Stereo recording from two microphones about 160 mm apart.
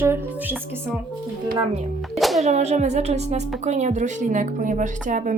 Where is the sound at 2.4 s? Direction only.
45° right (ahead or behind).